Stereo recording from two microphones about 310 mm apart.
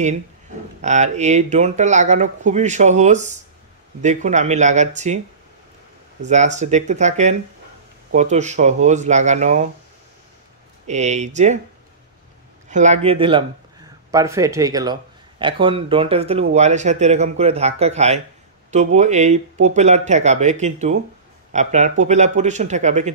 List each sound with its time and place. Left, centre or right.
0.7 s speech: right
6.2 s speech: right
10.9 s speech: right
12.6 s speech: right